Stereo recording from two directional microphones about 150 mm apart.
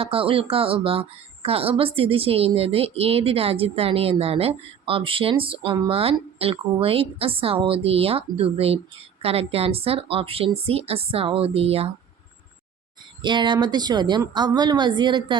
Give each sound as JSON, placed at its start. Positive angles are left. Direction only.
{"t": 0.0, "sound": "speech", "side_deg": -40}
{"t": 13.2, "sound": "speech", "side_deg": -30}